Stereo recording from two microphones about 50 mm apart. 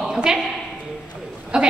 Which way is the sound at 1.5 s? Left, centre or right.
Centre.